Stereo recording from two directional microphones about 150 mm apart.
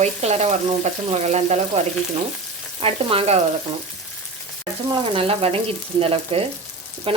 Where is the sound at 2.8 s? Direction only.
40° right (ahead or behind).